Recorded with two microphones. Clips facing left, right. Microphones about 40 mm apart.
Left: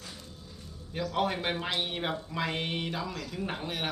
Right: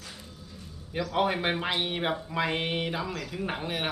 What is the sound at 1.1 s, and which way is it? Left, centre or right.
Speech, centre.